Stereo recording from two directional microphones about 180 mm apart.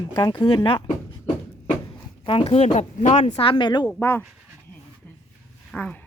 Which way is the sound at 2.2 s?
30° left (ahead or behind).